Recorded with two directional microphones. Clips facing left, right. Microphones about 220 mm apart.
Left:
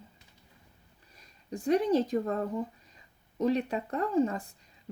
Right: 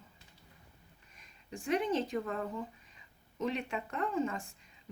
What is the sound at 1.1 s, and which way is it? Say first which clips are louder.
Speech: left 7 dB; 35° left (ahead or behind).